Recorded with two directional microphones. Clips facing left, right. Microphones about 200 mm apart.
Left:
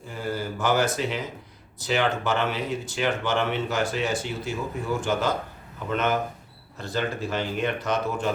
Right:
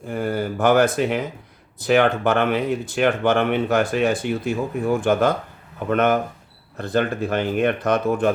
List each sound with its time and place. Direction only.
0.1 s speech: 55° right (ahead or behind)